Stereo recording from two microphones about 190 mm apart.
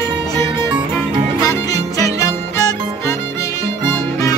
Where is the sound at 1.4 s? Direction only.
15° left (ahead or behind).